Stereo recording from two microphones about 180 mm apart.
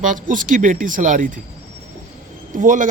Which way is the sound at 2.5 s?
45° right (ahead or behind).